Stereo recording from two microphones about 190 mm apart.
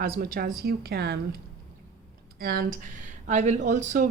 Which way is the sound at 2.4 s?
50° right (ahead or behind).